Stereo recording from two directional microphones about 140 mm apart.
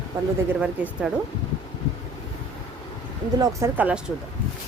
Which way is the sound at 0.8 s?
10° right (ahead or behind).